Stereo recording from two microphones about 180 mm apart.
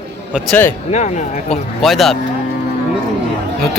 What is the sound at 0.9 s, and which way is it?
Speech, 40° left (ahead or behind).